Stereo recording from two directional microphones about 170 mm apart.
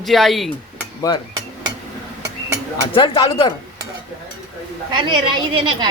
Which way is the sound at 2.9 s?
30° left (ahead or behind).